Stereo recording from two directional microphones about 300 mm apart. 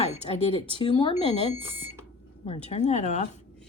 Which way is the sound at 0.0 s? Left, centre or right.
Left.